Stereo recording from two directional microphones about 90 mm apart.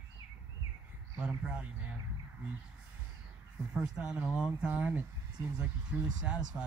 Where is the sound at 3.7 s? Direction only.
5° right (ahead or behind).